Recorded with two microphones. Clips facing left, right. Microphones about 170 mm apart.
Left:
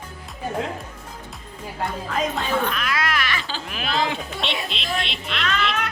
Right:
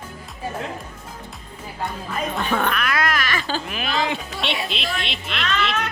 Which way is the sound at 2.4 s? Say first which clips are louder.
Right 1 dB; 60° right (ahead or behind).